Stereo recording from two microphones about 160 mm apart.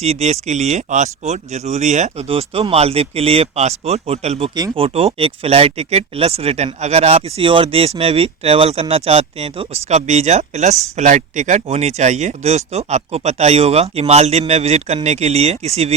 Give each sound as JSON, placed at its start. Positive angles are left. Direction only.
{"t": 0.0, "sound": "speech", "side_deg": -40}
{"t": 4.5, "sound": "speech", "side_deg": -30}